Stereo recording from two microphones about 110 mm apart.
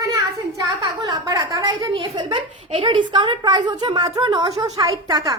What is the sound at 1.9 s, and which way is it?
A woman's voice, 55° right (ahead or behind).